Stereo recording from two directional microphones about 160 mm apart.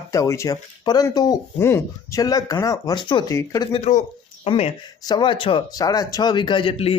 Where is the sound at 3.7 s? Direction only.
45° left (ahead or behind).